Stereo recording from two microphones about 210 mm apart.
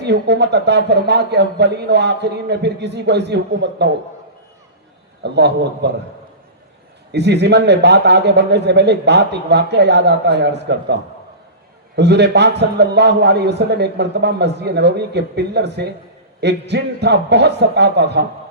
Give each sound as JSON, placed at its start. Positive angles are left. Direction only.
{"t": 0.0, "sound": "a man's voice", "side_deg": -55}
{"t": 5.2, "sound": "a man's voice", "side_deg": -55}
{"t": 7.1, "sound": "a man's voice", "side_deg": -55}
{"t": 11.9, "sound": "a man's voice", "side_deg": -55}